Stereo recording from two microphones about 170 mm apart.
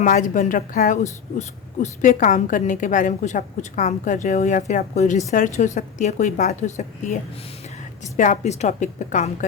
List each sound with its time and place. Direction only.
0.0 s a woman's voice: 45° left (ahead or behind)